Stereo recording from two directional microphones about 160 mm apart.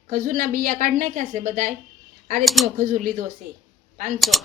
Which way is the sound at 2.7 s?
60° right (ahead or behind).